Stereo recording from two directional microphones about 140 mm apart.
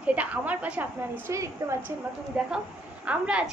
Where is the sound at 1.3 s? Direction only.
20° right (ahead or behind).